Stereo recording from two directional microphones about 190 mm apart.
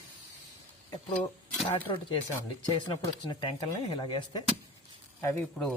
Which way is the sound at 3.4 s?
25° left (ahead or behind).